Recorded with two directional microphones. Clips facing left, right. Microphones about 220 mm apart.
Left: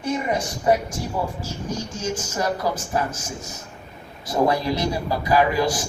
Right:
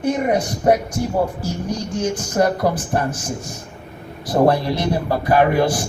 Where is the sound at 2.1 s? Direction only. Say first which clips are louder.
Right 7 dB; 60° right (ahead or behind).